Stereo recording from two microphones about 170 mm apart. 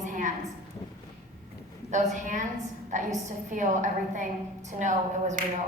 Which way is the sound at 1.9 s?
45° right (ahead or behind).